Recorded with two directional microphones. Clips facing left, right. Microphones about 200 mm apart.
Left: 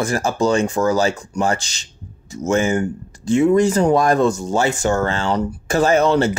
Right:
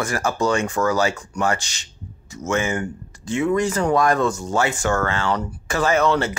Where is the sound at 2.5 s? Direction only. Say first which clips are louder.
Left 5 dB; 35° left (ahead or behind).